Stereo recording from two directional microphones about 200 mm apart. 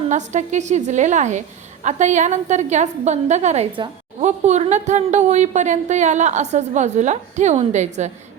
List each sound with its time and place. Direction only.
0.1 s a woman's voice: 35° right (ahead or behind)